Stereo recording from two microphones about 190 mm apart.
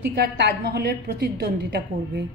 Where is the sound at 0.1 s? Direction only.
55° right (ahead or behind).